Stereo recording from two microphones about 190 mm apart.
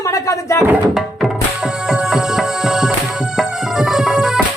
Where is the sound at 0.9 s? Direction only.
Centre (ahead or behind).